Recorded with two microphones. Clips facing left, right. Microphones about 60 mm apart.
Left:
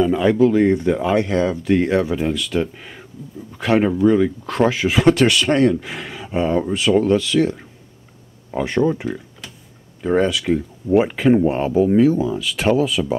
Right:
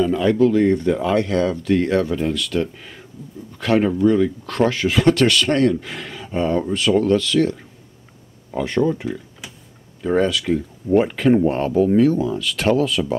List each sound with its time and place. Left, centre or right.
0.0 s speech: centre
9.4 s computer keyboard: centre
10.0 s speech: centre